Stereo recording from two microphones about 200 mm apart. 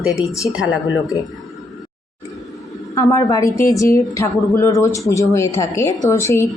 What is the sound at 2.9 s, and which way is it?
A woman's voice, 15° left (ahead or behind).